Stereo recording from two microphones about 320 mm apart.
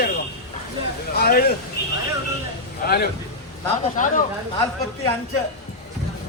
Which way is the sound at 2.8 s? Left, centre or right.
Left.